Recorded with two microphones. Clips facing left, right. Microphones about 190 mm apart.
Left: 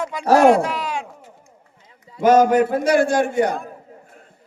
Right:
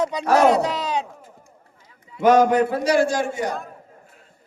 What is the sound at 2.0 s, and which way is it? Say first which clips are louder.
A man's voice: left 1 dB; 40° left (ahead or behind).